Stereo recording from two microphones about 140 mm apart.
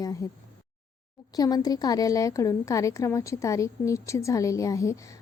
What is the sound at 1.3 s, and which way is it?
A woman's voice, 25° left (ahead or behind).